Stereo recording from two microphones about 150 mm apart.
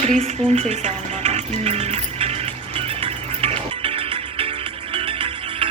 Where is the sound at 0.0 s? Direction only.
45° right (ahead or behind).